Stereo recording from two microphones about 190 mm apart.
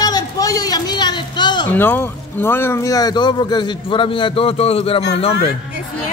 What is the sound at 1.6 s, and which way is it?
Speech, 10° left (ahead or behind).